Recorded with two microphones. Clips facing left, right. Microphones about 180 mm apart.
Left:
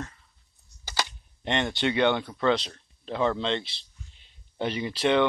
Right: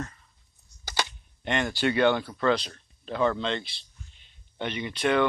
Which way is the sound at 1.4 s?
25° left (ahead or behind).